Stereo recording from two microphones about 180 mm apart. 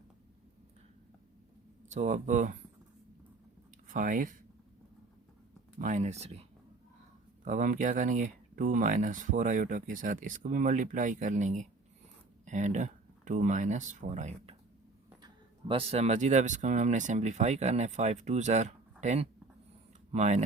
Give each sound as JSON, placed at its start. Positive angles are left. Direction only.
{"t": 1.9, "sound": "speech", "side_deg": -45}
{"t": 3.8, "sound": "speech", "side_deg": -45}
{"t": 5.8, "sound": "speech", "side_deg": -40}
{"t": 7.4, "sound": "speech", "side_deg": -45}
{"t": 15.2, "sound": "speech", "side_deg": -30}